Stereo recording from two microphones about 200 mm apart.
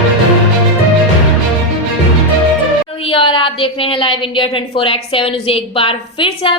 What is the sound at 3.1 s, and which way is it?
A woman's voice, 25° left (ahead or behind).